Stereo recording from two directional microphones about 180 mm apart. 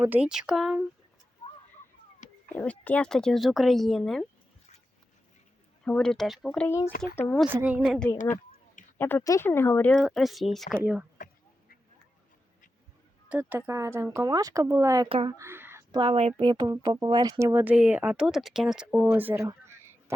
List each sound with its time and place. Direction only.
0.0 s speech: 10° right (ahead or behind)
2.5 s speech: 10° left (ahead or behind)
5.8 s speech: 5° left (ahead or behind)
6.7 s speech: 15° left (ahead or behind)
7.4 s speech: 10° right (ahead or behind)
7.8 s speech: 5° left (ahead or behind)
13.2 s speech: 10° right (ahead or behind)
15.9 s speech: 30° right (ahead or behind); by 19.0 s 5° right (ahead or behind)
19.1 s a sound: 10° right (ahead or behind)